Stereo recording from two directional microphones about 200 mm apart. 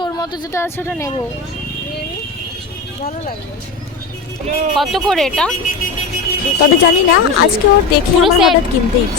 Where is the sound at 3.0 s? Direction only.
45° left (ahead or behind).